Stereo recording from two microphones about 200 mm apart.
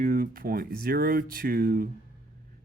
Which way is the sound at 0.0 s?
45° right (ahead or behind).